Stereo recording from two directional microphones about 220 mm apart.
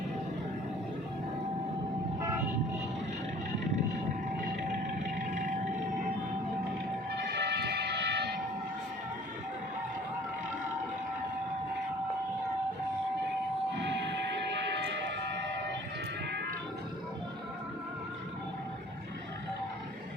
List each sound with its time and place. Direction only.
5.3 s a sound: 35° right (ahead or behind)
7.1 s music: 50° right (ahead or behind)
14.5 s music: 50° right (ahead or behind)